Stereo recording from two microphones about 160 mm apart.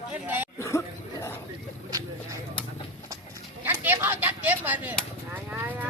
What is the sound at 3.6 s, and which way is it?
Speech, 10° right (ahead or behind).